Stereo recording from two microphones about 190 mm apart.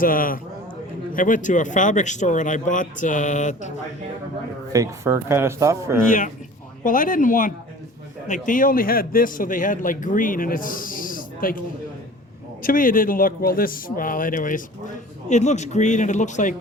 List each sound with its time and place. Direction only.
0.0 s a man's voice: 50° left (ahead or behind)
4.7 s speech: 15° right (ahead or behind)
6.1 s a man's voice: 45° left (ahead or behind)
12.6 s a man's voice: 45° left (ahead or behind)